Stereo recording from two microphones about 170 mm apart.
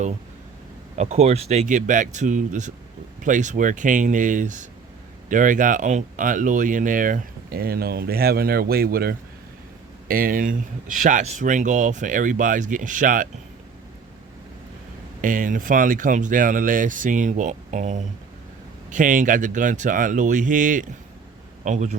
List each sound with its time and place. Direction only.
0.9 s speech: 40° right (ahead or behind)
15.2 s speech: 50° right (ahead or behind)